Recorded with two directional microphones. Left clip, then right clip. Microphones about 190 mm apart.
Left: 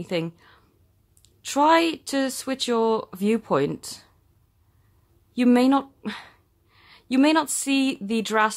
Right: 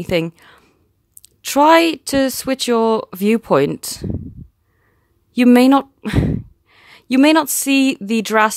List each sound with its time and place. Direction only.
0.0 s speech: 45° right (ahead or behind)
5.3 s speech: 45° right (ahead or behind)